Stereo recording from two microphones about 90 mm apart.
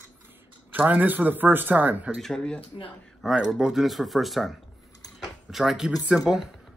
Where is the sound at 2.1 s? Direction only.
5° left (ahead or behind).